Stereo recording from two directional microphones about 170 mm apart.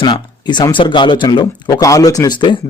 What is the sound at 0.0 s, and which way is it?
Speech, 25° left (ahead or behind).